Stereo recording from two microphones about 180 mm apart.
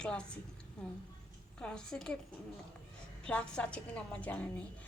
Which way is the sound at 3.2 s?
5° left (ahead or behind).